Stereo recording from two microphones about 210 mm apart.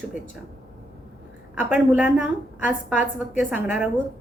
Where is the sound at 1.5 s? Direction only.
5° right (ahead or behind).